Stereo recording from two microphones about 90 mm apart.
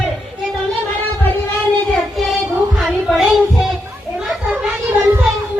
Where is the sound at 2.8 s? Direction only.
Centre (ahead or behind).